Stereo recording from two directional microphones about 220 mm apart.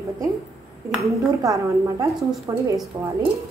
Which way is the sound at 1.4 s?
15° right (ahead or behind).